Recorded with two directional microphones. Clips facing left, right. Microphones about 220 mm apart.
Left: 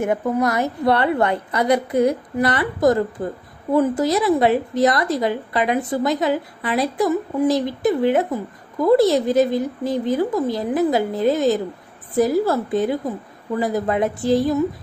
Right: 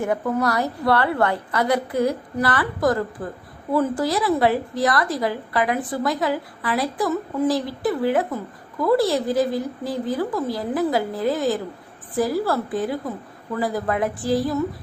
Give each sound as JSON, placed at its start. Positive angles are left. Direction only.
{"t": 0.0, "sound": "a woman's voice", "side_deg": 20}